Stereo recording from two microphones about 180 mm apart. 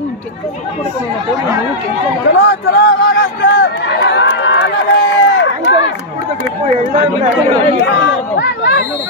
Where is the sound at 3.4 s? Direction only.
80° left.